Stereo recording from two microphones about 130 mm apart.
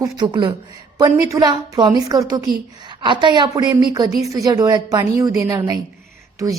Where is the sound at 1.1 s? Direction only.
20° right (ahead or behind).